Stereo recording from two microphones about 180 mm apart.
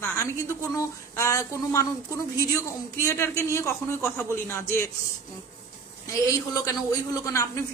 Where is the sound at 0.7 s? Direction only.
15° left (ahead or behind).